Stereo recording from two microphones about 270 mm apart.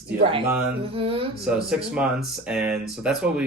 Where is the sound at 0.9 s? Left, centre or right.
Centre.